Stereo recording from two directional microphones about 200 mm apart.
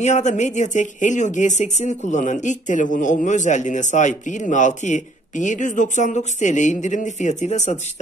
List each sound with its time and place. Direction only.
0.0 s speech: 35° left (ahead or behind)